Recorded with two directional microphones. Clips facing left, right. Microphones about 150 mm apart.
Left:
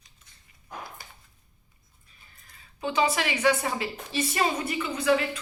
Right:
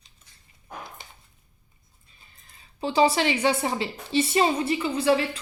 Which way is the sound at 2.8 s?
30° right (ahead or behind).